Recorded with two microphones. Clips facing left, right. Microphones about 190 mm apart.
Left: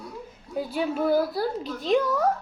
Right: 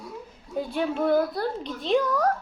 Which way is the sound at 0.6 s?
5° left (ahead or behind).